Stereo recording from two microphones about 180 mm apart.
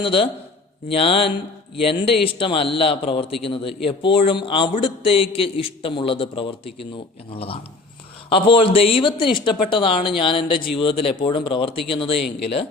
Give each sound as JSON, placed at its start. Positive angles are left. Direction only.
{"t": 0.0, "sound": "speech", "side_deg": 30}